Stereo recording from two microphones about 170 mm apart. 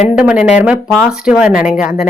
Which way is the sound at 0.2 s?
5° right (ahead or behind).